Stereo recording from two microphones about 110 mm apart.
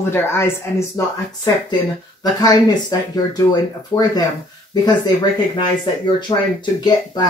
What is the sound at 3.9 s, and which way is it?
Speech, 15° left (ahead or behind).